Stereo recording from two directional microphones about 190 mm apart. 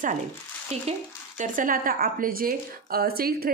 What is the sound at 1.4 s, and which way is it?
Speech, 45° right (ahead or behind).